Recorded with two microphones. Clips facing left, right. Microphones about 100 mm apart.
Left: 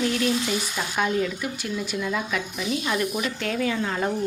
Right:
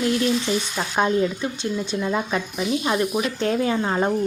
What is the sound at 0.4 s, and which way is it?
Speech, 30° right (ahead or behind).